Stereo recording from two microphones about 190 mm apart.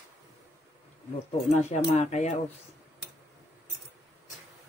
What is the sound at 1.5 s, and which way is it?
Speech, 35° left (ahead or behind).